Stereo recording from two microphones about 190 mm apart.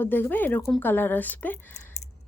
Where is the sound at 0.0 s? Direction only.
10° left (ahead or behind).